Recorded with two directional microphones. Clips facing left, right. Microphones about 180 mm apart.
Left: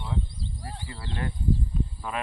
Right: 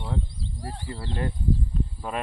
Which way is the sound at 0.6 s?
35° right (ahead or behind).